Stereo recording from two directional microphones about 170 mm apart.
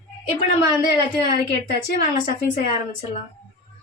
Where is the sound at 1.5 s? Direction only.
55° left (ahead or behind).